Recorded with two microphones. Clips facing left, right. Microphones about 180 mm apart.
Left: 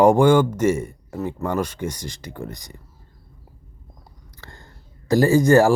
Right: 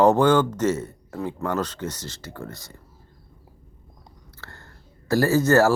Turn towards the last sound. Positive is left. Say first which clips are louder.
# left 3 dB
turn(degrees=15)  # may be behind; listen again after turning